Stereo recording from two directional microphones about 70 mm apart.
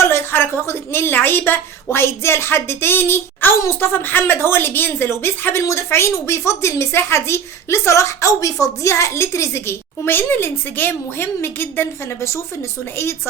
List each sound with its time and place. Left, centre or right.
0.0 s a woman's voice: left